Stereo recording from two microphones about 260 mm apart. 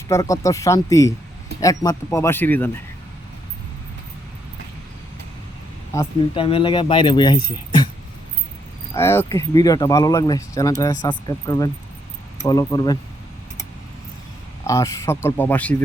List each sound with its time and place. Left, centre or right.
0.1 s speech: centre
5.9 s speech: centre
9.0 s speech: centre
14.6 s speech: centre